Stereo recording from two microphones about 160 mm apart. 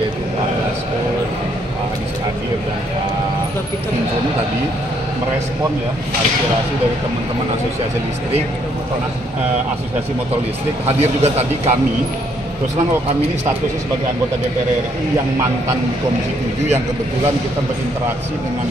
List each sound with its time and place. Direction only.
11.0 s a man's voice: 40° right (ahead or behind)